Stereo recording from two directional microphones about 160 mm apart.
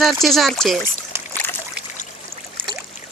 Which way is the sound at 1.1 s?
15° right (ahead or behind).